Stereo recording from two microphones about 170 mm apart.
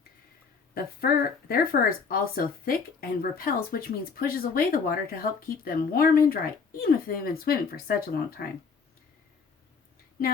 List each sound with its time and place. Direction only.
0.7 s speech: 60° left (ahead or behind)